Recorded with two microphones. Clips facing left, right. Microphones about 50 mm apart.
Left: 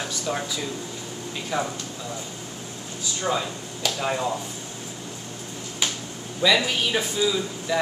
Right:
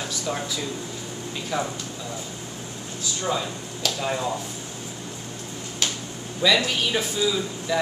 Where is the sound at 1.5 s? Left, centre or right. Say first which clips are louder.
Even; left.